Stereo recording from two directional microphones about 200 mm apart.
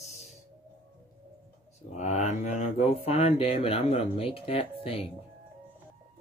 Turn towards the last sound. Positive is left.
turn(degrees=30)  # may be behind; listen again after turning